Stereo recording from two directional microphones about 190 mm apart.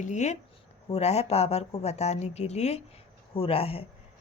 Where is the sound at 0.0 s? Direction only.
40° left (ahead or behind).